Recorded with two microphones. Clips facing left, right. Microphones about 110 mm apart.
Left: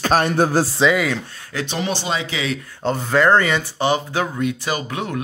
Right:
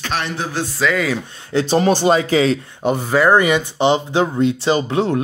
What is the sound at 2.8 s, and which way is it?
Speech, 10° right (ahead or behind).